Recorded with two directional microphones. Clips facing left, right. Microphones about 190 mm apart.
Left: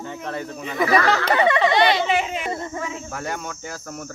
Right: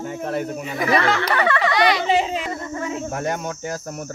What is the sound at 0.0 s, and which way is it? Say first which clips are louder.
Speech: right 5 dB; 10° right (ahead or behind).